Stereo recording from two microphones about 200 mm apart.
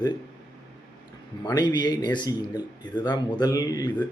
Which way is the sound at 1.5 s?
20° left (ahead or behind).